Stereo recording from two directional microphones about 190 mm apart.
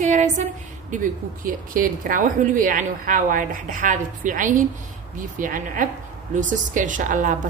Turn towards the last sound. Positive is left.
turn(degrees=-45)  # may be behind; listen again after turning